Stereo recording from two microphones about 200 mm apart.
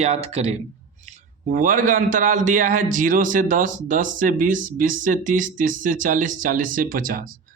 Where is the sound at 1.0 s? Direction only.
40° right (ahead or behind).